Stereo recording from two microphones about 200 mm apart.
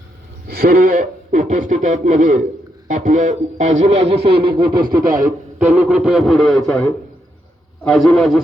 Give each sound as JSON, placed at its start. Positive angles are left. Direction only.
{"t": 0.4, "sound": "speech", "side_deg": -50}
{"t": 4.8, "sound": "speech", "side_deg": -45}
{"t": 5.7, "sound": "a man's voice", "side_deg": -10}